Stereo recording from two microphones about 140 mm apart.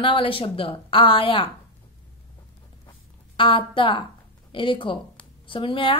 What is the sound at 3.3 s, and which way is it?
A woman's voice, 35° left (ahead or behind).